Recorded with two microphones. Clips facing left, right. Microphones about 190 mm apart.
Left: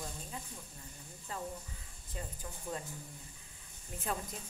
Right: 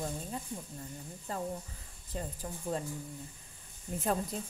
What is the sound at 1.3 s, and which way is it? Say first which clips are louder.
Speech: right 5 dB; 40° right (ahead or behind).